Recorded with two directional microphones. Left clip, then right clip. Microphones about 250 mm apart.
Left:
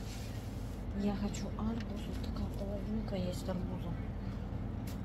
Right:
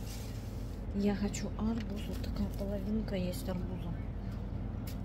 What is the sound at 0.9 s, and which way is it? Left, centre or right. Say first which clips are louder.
Speech: right 4 dB; centre.